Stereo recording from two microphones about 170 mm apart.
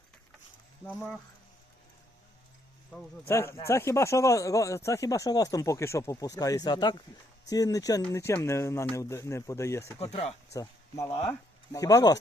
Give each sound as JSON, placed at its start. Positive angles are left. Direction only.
{"t": 0.9, "sound": "speech", "side_deg": 10}
{"t": 3.2, "sound": "speech", "side_deg": 15}
{"t": 10.0, "sound": "speech", "side_deg": 40}
{"t": 10.5, "sound": "speech", "side_deg": 20}